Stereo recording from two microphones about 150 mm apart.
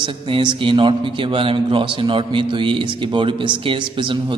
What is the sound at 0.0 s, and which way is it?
A man's voice, 35° right (ahead or behind).